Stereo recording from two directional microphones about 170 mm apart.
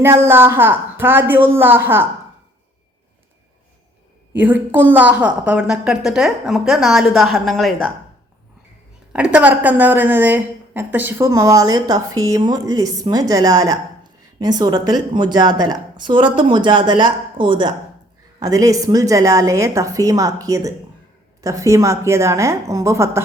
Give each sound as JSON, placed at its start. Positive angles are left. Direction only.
{"t": 0.0, "sound": "a woman's voice", "side_deg": -15}
{"t": 4.3, "sound": "a woman's voice", "side_deg": -10}
{"t": 9.1, "sound": "a woman's voice", "side_deg": -5}